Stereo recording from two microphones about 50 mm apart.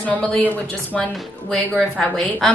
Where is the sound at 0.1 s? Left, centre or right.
Left.